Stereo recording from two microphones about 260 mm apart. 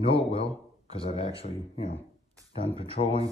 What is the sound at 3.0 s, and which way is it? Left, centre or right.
Speech, left.